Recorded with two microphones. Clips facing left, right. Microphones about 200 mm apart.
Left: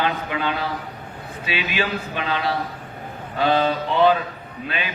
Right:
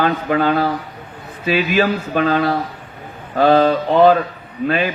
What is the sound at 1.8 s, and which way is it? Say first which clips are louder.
A man's voice: right 9 dB; 45° right (ahead or behind).